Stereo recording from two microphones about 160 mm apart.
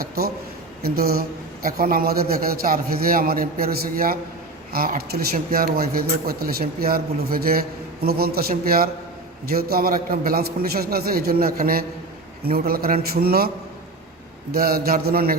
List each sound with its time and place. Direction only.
0.9 s a man's voice: 70° right (ahead or behind)
14.5 s a man's voice: 70° right (ahead or behind)